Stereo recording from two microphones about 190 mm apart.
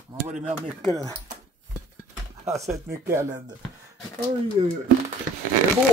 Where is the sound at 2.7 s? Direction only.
15° right (ahead or behind).